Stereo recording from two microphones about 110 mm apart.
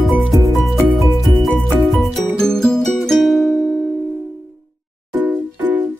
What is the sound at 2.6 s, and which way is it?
Music, 5° left (ahead or behind).